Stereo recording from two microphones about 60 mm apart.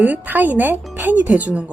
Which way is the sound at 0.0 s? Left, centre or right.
Right.